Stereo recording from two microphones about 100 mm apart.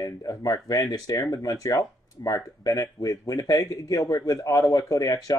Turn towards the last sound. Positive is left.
turn(degrees=35)  # may be behind; listen again after turning